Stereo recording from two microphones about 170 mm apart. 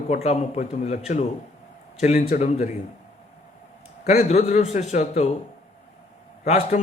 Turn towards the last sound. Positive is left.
turn(degrees=45)  # may be behind; listen again after turning